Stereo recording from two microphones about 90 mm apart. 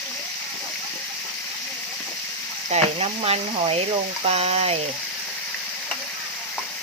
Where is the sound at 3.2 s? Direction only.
90° right.